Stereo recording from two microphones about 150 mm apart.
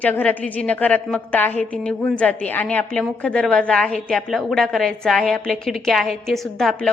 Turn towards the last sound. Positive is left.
turn(degrees=5)  # may be behind; listen again after turning